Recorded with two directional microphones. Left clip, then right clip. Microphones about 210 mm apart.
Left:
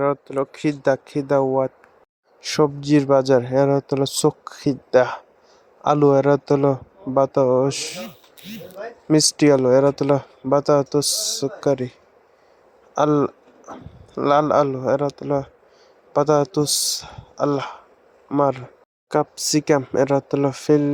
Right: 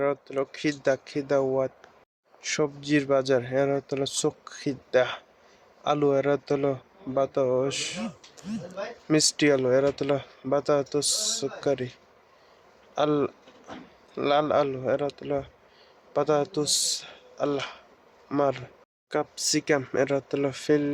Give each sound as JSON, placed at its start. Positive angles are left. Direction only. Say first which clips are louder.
{"t": 0.0, "sound": "speech", "louder": "left 6 dB", "side_deg": 20}
{"t": 9.0, "sound": "speech", "louder": "left 7 dB", "side_deg": 25}
{"t": 13.0, "sound": "speech", "louder": "left 6 dB", "side_deg": 25}